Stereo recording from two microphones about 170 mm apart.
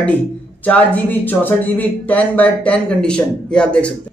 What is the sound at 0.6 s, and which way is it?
Speech, 10° left (ahead or behind).